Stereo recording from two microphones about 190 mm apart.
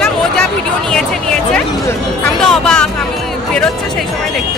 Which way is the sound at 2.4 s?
5° left (ahead or behind).